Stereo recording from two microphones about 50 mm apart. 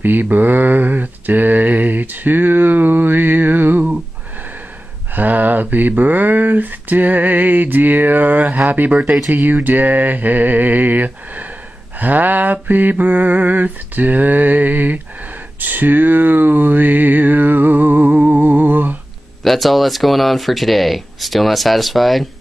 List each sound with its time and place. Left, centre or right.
0.0 s a sound: right
5.1 s speech: right
19.4 s speech: centre